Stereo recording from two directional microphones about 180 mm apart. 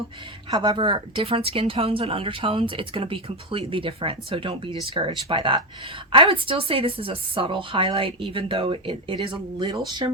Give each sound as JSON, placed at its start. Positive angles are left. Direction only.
{"t": 0.5, "sound": "a woman's voice", "side_deg": -25}